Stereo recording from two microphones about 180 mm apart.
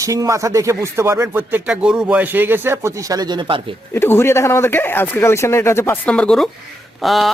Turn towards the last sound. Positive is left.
turn(degrees=0)  # may be behind; listen again after turning